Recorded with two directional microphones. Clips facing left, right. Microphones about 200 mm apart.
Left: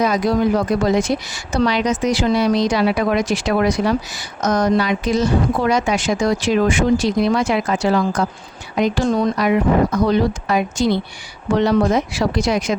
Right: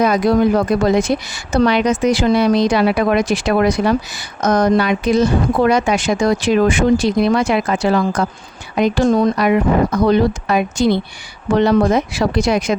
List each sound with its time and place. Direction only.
0.0 s speech: 55° right (ahead or behind)